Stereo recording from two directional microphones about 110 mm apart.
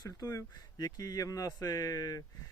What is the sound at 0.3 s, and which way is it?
Speech, 30° left (ahead or behind).